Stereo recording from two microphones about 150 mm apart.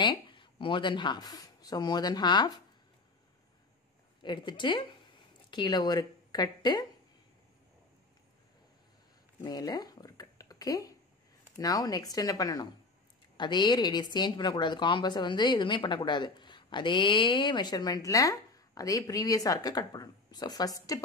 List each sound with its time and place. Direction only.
0.0 s speech: 30° left (ahead or behind)
4.2 s speech: 30° left (ahead or behind)
9.4 s a sound: 25° left (ahead or behind)
11.5 s a woman's voice: 25° left (ahead or behind)